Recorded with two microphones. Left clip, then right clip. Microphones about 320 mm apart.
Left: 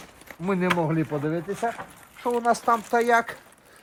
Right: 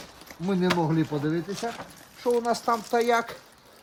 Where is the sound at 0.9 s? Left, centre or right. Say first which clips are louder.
Even; centre.